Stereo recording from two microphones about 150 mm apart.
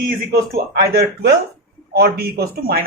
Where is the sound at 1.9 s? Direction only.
90° right.